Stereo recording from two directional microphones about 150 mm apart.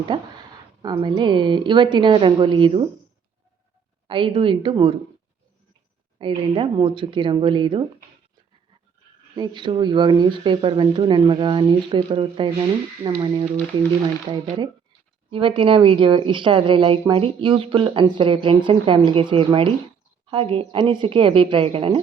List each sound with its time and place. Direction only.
0.1 s speech: 30° right (ahead or behind)
4.0 s speech: 35° right (ahead or behind)
6.1 s speech: 35° right (ahead or behind)
9.3 s speech: 30° right (ahead or behind)
15.3 s speech: 35° right (ahead or behind)